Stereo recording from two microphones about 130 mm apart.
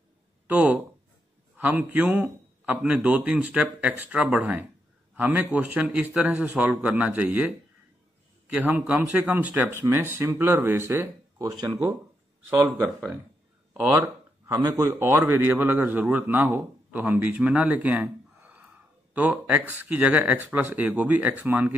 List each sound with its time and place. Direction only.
0.5 s a man's voice: 10° right (ahead or behind)
11.4 s speech: 30° right (ahead or behind)
13.7 s a man's voice: 20° right (ahead or behind)